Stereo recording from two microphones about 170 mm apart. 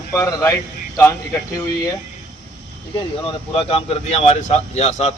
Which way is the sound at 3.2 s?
30° left (ahead or behind).